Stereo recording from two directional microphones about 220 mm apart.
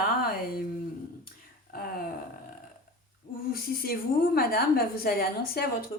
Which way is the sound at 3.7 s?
45° left (ahead or behind).